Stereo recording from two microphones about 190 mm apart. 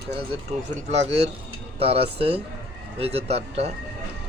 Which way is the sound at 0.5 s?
35° right (ahead or behind).